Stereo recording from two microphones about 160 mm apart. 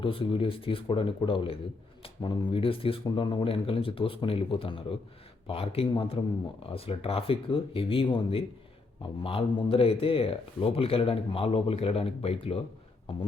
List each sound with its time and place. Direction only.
0.0 s speech: 35° left (ahead or behind)